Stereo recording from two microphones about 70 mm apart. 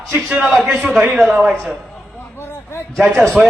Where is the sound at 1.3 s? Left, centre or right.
Centre.